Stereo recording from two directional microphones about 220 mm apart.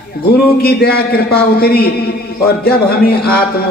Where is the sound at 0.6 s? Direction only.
45° left (ahead or behind).